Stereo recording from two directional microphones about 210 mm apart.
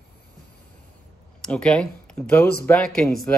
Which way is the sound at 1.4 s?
5° left (ahead or behind).